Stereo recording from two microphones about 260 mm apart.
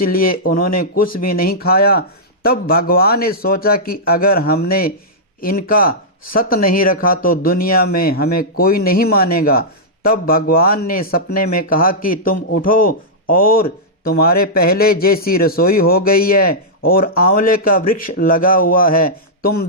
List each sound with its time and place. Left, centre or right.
0.0 s speech: left